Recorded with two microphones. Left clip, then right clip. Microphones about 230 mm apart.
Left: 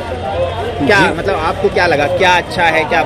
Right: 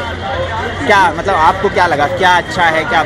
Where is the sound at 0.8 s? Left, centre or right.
Centre.